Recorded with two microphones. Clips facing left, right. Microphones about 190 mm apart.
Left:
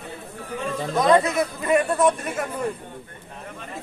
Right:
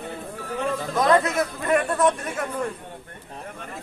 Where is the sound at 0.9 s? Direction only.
Centre (ahead or behind).